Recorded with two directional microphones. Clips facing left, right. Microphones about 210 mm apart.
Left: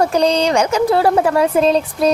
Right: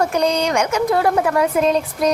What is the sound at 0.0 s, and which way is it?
A woman's voice, 30° left (ahead or behind).